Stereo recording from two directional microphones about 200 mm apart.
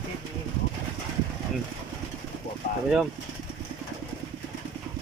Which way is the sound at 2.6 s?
40° left (ahead or behind).